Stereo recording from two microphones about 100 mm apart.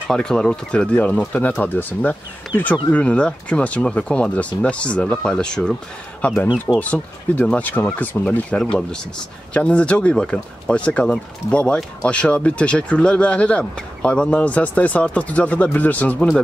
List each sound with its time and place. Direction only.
0.1 s speech: 5° left (ahead or behind)